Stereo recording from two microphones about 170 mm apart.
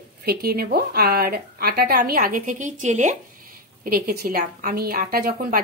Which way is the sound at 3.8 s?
60° right (ahead or behind).